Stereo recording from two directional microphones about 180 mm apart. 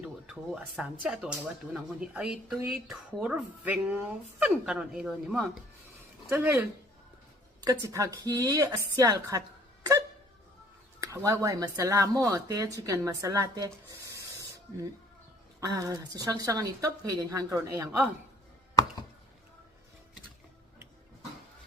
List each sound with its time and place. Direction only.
0.8 s speech: 5° right (ahead or behind); by 9.4 s 20° right (ahead or behind)
11.0 s speech: 15° right (ahead or behind)
14.1 s spray: 15° right (ahead or behind)
15.6 s speech: 20° right (ahead or behind)